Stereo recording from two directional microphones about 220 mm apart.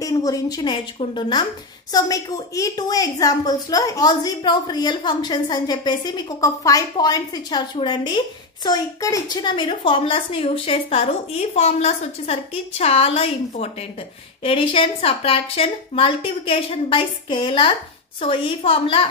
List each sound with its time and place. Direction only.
0.0 s a woman's voice: 15° left (ahead or behind)